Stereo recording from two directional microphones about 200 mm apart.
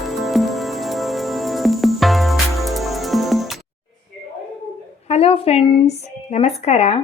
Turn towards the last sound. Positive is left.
turn(degrees=30)  # may be behind; listen again after turning